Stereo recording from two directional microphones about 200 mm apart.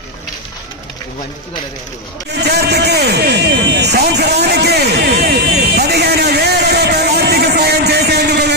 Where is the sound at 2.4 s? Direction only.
55° right (ahead or behind).